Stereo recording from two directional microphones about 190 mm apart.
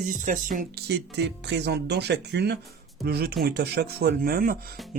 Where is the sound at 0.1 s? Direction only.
45° right (ahead or behind).